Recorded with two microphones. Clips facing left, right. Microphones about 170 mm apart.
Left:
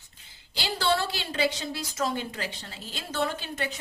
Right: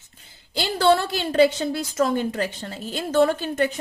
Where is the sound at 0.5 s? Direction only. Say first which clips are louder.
Right 8 dB; 55° right (ahead or behind).